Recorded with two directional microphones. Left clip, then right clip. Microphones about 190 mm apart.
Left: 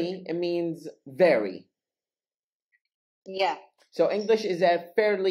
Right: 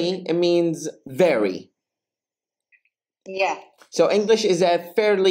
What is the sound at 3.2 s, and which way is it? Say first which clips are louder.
Speech: right 4 dB; 20° left (ahead or behind).